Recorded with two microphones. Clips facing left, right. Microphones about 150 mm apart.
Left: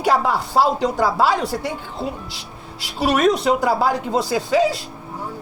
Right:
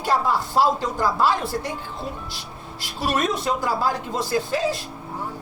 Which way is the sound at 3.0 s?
80° left.